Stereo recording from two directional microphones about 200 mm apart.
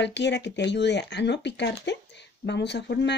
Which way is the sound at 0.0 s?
60° left (ahead or behind).